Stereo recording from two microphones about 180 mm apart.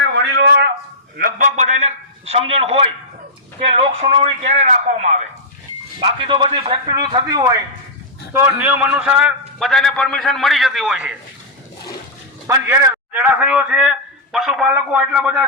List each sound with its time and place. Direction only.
0.1 s a sound: 65° right (ahead or behind)
1.1 s a man's voice: 50° right (ahead or behind)
6.0 s a man's voice: 25° right (ahead or behind)
8.3 s a man's voice: 10° right (ahead or behind)
12.5 s a man's voice: 15° right (ahead or behind)